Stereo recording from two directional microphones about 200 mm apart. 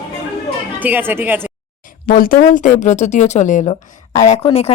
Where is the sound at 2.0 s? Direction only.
45° left (ahead or behind).